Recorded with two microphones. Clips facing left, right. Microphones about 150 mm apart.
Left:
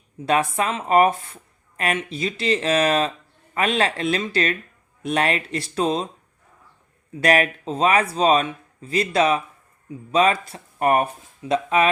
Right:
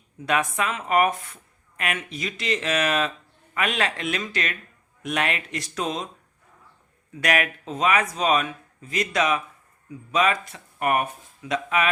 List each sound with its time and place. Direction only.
0.3 s speech: 30° left (ahead or behind)
7.1 s speech: 30° left (ahead or behind)